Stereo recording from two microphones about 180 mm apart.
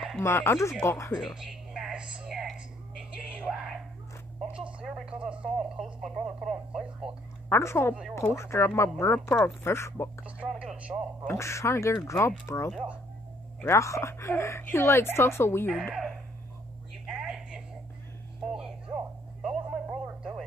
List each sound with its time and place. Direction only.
0.2 s speech: 10° left (ahead or behind)
1.1 s a sound: centre (ahead or behind)
4.5 s radio: 5° right (ahead or behind)
7.4 s a woman's voice: 15° left (ahead or behind)
10.2 s a sound: 5° right (ahead or behind)
11.2 s speech: 15° left (ahead or behind)
15.7 s speech: 5° right (ahead or behind)
17.0 s a sound: centre (ahead or behind)
19.4 s radio: centre (ahead or behind)